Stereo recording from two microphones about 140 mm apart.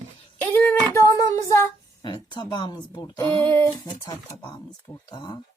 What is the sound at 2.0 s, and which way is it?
Speech, 30° left (ahead or behind).